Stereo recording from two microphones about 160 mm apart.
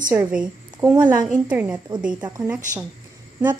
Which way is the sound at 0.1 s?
10° right (ahead or behind).